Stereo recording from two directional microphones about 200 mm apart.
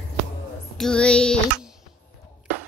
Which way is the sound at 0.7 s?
5° left (ahead or behind).